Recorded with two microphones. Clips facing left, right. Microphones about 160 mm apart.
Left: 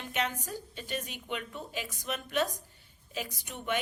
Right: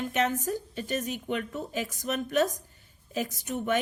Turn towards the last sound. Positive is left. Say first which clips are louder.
# right 6 dB
turn(degrees=-45)  # may be behind; listen again after turning